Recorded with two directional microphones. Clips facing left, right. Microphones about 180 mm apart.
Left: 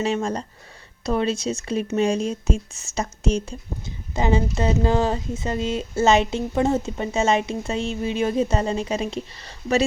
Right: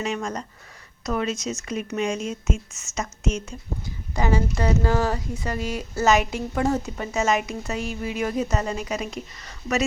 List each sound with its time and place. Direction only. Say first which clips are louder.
0.0 s speech: left 4 dB; 30° left (ahead or behind)
3.8 s speech: left 2 dB; 20° left (ahead or behind)